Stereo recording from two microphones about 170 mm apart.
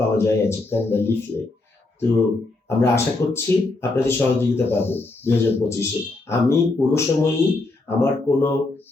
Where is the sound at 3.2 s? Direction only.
15° left (ahead or behind).